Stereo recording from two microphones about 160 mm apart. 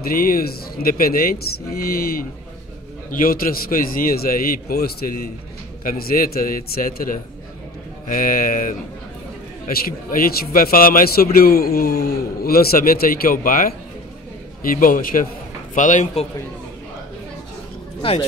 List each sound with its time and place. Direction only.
0.0 s a man's voice: 65° left (ahead or behind)
3.1 s a man's voice: 60° left (ahead or behind)